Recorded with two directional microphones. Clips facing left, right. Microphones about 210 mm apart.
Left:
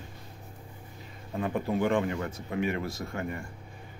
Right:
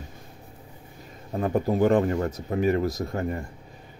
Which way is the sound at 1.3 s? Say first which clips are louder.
Right 5 dB; 40° right (ahead or behind).